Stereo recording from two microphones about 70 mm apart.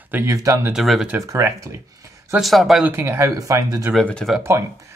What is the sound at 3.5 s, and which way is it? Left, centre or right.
Speech, right.